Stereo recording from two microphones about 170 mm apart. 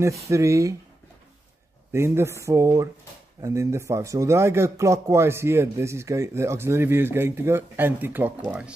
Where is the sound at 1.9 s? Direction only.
15° right (ahead or behind).